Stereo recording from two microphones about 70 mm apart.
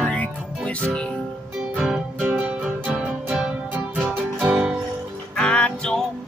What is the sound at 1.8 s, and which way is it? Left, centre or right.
Music, centre.